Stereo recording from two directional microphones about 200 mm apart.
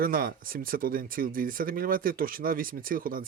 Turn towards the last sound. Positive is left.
turn(degrees=-45)  # may be behind; listen again after turning